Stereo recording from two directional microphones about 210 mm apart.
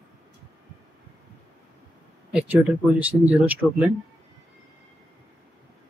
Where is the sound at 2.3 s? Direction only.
5° right (ahead or behind).